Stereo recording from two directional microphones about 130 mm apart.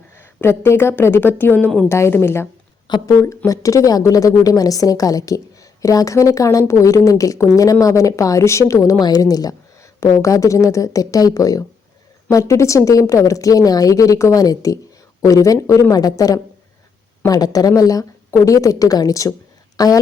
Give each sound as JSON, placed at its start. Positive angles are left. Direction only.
{"t": 0.2, "sound": "speech", "side_deg": 20}
{"t": 1.9, "sound": "a woman's voice", "side_deg": 20}